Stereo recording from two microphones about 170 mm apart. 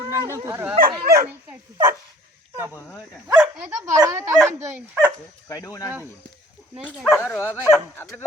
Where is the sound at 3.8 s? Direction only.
20° right (ahead or behind).